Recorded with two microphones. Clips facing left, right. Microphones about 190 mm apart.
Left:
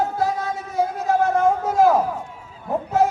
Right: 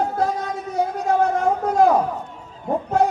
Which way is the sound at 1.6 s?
5° left (ahead or behind).